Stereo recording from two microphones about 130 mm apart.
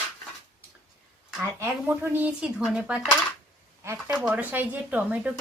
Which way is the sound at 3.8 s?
20° right (ahead or behind).